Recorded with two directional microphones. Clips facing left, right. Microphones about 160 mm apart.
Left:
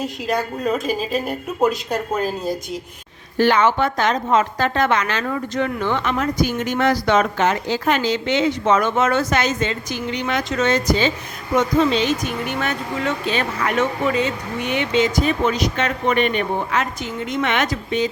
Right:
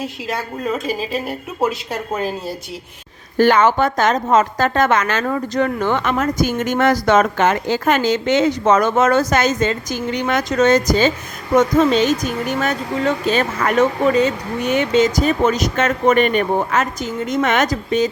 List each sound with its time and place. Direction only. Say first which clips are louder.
0.3 s a woman's voice: left 2 dB; centre (ahead or behind)
3.3 s a woman's voice: right 3 dB; 45° right (ahead or behind)